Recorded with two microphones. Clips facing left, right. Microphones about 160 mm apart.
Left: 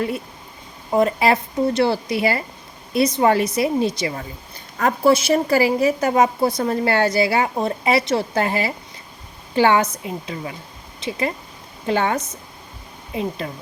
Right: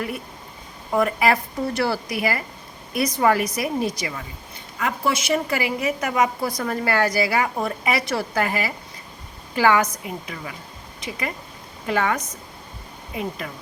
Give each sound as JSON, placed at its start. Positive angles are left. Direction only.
{"t": 0.9, "sound": "a woman's voice", "side_deg": 25}